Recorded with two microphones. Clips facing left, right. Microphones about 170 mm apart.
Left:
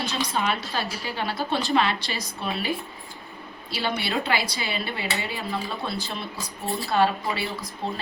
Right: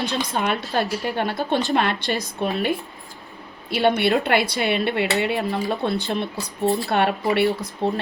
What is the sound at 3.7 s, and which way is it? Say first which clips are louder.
A woman's voice: right 9 dB; 60° right (ahead or behind).